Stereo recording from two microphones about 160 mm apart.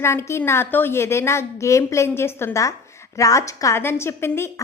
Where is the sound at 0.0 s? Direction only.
15° left (ahead or behind).